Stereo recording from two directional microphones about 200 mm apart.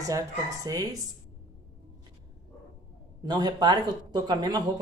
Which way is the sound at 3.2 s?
20° right (ahead or behind).